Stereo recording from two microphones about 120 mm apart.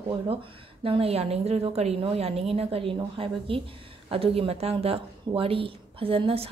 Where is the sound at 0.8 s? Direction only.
50° right (ahead or behind).